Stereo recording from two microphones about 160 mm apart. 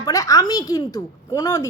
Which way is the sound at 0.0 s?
20° left (ahead or behind).